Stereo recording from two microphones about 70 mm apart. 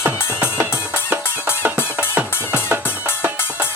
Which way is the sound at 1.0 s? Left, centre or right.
Right.